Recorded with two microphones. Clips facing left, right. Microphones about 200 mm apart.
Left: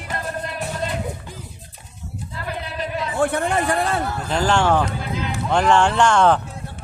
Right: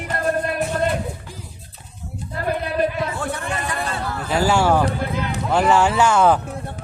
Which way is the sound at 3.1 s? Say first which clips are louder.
Left 6 dB; 60° left (ahead or behind).